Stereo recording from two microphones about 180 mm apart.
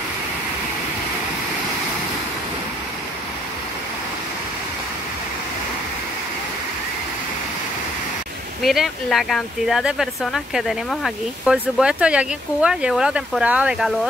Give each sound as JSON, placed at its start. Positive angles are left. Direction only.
{"t": 8.6, "sound": "speech", "side_deg": 0}